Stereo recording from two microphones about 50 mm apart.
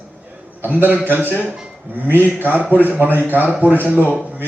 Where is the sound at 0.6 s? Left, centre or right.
Right.